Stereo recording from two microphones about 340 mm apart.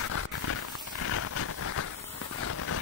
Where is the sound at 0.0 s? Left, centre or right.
Left.